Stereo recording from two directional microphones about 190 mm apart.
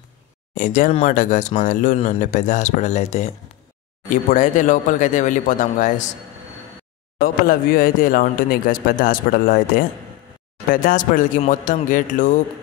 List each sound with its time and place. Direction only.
0.6 s speech: 45° left (ahead or behind)
7.2 s speech: 50° left (ahead or behind)